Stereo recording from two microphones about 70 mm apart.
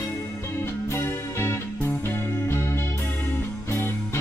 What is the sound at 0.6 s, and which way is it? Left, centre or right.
Music, left.